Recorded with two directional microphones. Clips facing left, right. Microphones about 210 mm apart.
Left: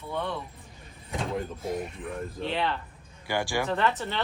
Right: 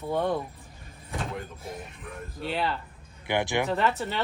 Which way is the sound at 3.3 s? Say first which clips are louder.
Right 2 dB; 20° right (ahead or behind).